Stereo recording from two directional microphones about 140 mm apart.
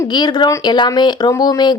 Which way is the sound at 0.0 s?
30° left (ahead or behind).